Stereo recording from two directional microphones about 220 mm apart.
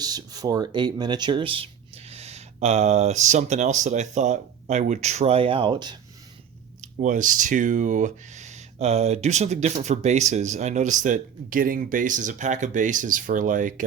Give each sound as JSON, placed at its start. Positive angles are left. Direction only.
{"t": 0.0, "sound": "speech", "side_deg": -15}
{"t": 6.8, "sound": "speech", "side_deg": -35}